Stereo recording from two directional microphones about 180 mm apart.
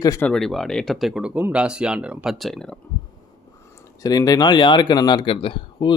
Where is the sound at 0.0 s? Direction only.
20° left (ahead or behind).